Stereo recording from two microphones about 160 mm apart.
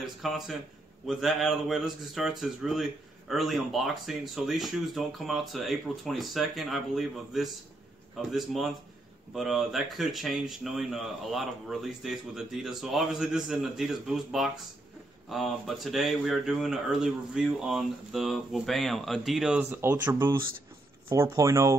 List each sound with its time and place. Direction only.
0.0 s a man's voice: centre (ahead or behind); by 21.7 s 20° right (ahead or behind)